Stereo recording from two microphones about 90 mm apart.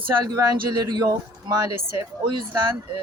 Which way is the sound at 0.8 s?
50° right (ahead or behind).